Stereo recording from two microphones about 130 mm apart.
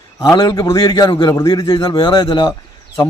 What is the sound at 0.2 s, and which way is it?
A man's voice, 30° left (ahead or behind).